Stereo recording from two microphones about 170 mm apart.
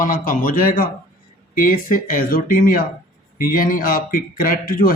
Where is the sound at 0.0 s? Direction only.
55° left (ahead or behind).